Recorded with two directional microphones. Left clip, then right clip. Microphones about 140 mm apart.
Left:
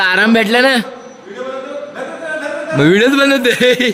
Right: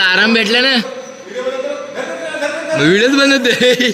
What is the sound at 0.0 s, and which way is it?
Speech, 75° left (ahead or behind).